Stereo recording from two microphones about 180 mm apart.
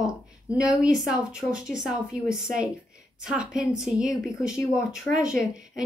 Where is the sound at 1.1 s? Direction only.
5° right (ahead or behind).